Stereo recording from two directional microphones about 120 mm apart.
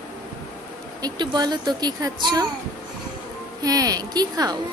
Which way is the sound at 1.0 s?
35° right (ahead or behind).